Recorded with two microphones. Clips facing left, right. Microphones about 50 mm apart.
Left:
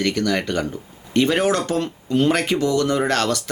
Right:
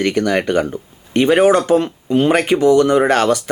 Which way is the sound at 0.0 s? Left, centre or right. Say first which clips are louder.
Right 5 dB; right.